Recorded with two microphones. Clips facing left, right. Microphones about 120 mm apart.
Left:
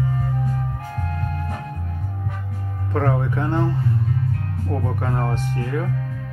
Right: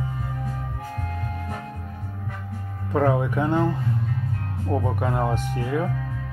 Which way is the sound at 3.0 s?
10° right (ahead or behind).